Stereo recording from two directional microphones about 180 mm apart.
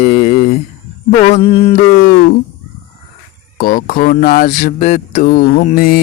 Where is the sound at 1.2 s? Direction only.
35° left (ahead or behind).